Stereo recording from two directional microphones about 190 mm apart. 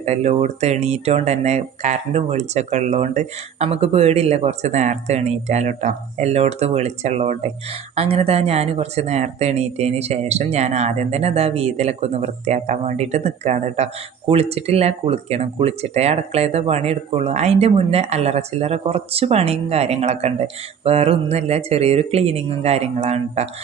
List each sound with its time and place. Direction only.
0.0 s speech: 35° right (ahead or behind)